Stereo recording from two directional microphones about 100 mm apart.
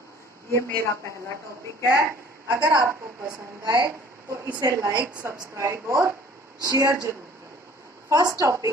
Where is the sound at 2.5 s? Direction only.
30° right (ahead or behind).